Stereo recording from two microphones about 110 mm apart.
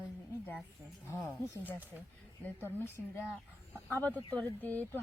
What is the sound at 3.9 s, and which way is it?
Speech, 15° left (ahead or behind).